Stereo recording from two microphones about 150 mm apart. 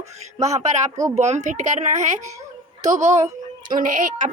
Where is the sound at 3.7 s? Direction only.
60° right (ahead or behind).